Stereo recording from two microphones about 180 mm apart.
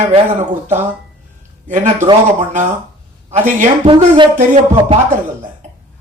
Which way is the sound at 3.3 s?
45° right (ahead or behind).